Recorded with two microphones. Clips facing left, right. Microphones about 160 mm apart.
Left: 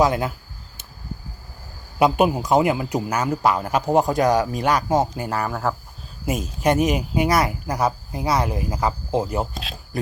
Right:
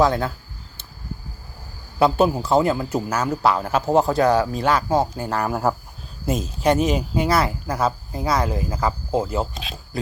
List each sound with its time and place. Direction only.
0.0 s speech: 10° left (ahead or behind)
2.0 s speech: 15° left (ahead or behind)
5.5 s speech: 15° right (ahead or behind)
6.2 s speech: 10° left (ahead or behind)